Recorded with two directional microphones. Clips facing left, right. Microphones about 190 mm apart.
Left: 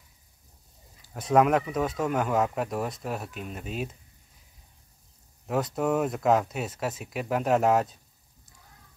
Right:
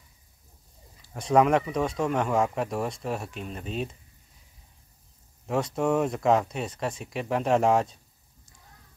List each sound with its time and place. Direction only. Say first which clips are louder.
1.1 s speech: right 1 dB; centre (ahead or behind)
5.5 s speech: right 1 dB; centre (ahead or behind)